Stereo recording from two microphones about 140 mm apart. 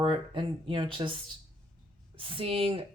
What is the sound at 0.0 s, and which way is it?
Speech, 35° right (ahead or behind).